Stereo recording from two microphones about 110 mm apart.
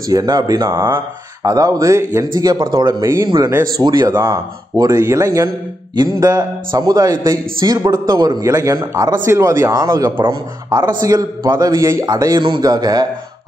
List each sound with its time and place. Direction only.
0.1 s a man's voice: 35° right (ahead or behind)
1.5 s a man's voice: 35° right (ahead or behind)
2.3 s a man's voice: 40° right (ahead or behind)
3.0 s speech: 25° right (ahead or behind)
3.8 s a man's voice: 40° right (ahead or behind)
4.7 s a man's voice: 30° right (ahead or behind)
9.2 s a man's voice: 25° right (ahead or behind)
10.2 s a man's voice: 45° right (ahead or behind)
12.4 s a man's voice: 40° right (ahead or behind)